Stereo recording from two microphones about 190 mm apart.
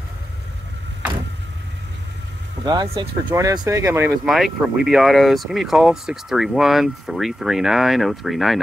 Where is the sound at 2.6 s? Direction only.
20° right (ahead or behind).